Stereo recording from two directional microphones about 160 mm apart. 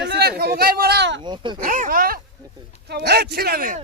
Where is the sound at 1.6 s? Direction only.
60° right (ahead or behind).